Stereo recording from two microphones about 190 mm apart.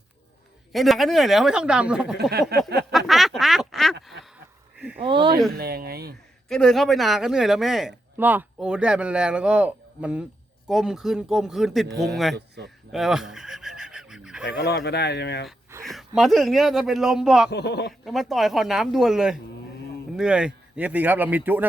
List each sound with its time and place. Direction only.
0.7 s speech: centre (ahead or behind)
3.1 s quack: centre (ahead or behind)
5.0 s a sound: 25° right (ahead or behind)
5.5 s speech: 55° right (ahead or behind)
6.5 s speech: centre (ahead or behind)
12.9 s a sound: centre (ahead or behind)
14.4 s speech: 60° left (ahead or behind)
15.8 s speech: centre (ahead or behind)
17.5 s speech: 60° left (ahead or behind)
18.0 s speech: centre (ahead or behind)